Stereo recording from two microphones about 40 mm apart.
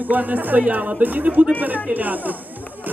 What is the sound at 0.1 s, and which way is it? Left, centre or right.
Speech, right.